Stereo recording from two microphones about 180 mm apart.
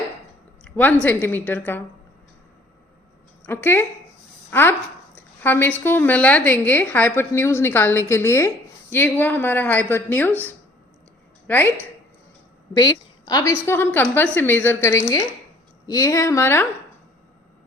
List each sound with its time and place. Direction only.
0.6 s a woman's voice: 5° left (ahead or behind)
3.4 s a woman's voice: 10° left (ahead or behind)
11.4 s a woman's voice: 10° left (ahead or behind)
12.7 s a woman's voice: 20° left (ahead or behind)